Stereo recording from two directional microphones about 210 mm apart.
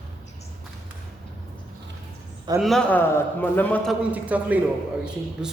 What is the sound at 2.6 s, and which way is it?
A man's voice, centre (ahead or behind).